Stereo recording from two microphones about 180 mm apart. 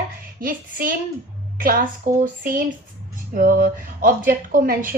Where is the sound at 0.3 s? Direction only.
50° right (ahead or behind).